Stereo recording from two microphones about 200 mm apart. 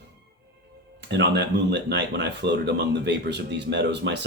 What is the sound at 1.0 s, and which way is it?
Speech, 60° right (ahead or behind).